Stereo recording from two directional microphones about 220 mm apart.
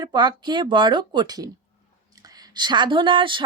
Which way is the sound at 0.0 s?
20° right (ahead or behind).